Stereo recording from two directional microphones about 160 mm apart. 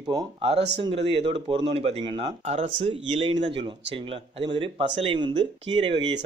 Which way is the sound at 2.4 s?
45° right (ahead or behind).